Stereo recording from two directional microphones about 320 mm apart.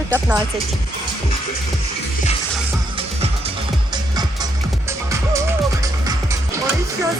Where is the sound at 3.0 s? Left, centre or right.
Centre.